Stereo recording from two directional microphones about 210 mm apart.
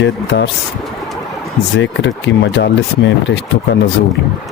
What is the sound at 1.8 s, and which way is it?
Speech, 60° left (ahead or behind).